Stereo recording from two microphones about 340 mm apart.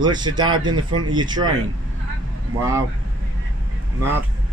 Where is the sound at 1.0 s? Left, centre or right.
Right.